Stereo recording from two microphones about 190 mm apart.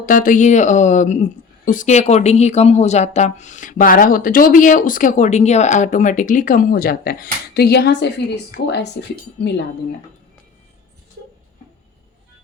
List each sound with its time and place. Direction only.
0.0 s speech: 45° left (ahead or behind); by 9.5 s 65° left (ahead or behind)